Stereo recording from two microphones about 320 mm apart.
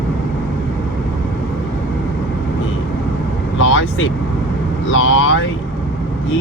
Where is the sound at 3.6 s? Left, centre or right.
Left.